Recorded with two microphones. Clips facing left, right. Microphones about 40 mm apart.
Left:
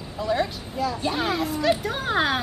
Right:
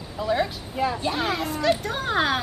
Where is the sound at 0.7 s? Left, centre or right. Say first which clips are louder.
Right 2 dB; right.